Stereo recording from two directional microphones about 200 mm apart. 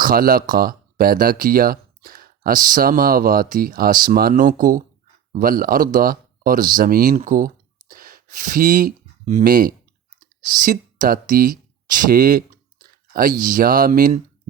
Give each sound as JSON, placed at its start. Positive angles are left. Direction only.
{"t": 0.0, "sound": "speech", "side_deg": -45}
{"t": 10.4, "sound": "a sound", "side_deg": -45}
{"t": 13.4, "sound": "speech", "side_deg": -45}